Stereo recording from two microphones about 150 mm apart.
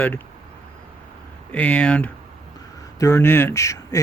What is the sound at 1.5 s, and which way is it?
Speech, 10° left (ahead or behind).